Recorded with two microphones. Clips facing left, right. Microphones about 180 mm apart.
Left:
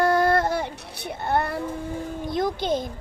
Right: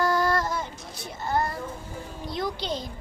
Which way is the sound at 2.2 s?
50° left (ahead or behind).